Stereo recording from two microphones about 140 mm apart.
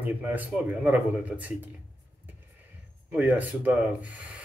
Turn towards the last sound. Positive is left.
turn(degrees=-10)  # may be behind; listen again after turning